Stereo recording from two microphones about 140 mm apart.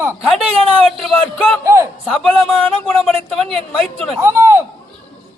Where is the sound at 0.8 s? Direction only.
5° left (ahead or behind).